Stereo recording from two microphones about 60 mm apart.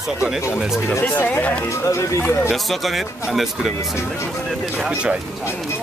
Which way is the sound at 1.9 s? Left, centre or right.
Left.